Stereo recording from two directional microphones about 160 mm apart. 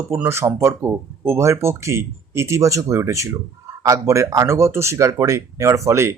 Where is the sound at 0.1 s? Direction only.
15° right (ahead or behind).